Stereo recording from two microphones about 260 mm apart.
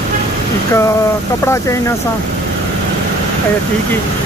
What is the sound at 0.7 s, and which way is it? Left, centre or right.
Speech, centre.